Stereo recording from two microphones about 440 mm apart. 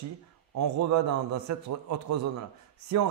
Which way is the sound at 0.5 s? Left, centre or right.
Right.